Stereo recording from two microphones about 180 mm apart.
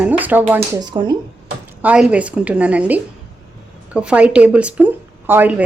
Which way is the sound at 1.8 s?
5° right (ahead or behind).